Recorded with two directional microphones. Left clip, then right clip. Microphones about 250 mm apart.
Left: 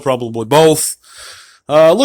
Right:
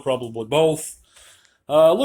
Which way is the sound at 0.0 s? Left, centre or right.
Left.